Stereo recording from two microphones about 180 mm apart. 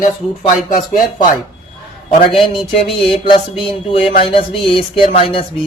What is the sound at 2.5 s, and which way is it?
Speech, 30° left (ahead or behind).